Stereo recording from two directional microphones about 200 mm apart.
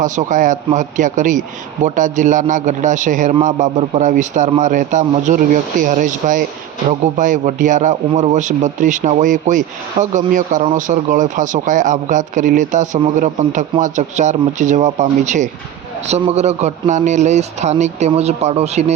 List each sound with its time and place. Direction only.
0.0 s speech: 40° right (ahead or behind)